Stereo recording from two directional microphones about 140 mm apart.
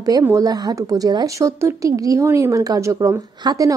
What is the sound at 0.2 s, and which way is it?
Speech, 25° right (ahead or behind).